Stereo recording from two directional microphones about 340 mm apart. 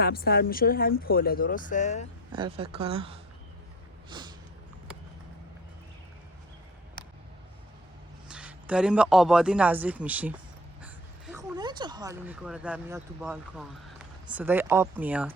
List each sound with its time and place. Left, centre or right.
0.0 s speech: left
2.3 s speech: centre
4.1 s a sound: centre
8.3 s a man's voice: centre